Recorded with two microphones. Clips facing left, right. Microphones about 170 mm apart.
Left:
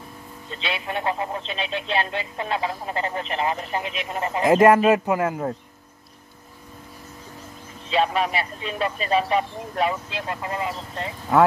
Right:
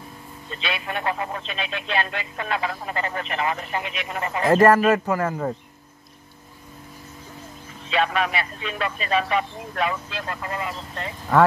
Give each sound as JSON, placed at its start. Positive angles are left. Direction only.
{"t": 0.6, "sound": "speech", "side_deg": 20}
{"t": 4.4, "sound": "speech", "side_deg": 15}
{"t": 7.9, "sound": "speech", "side_deg": 35}
{"t": 10.0, "sound": "speech", "side_deg": 20}